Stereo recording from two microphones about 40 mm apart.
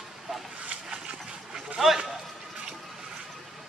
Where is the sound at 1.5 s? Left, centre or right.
Centre.